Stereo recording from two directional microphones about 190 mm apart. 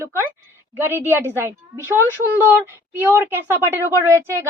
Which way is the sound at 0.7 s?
10° right (ahead or behind).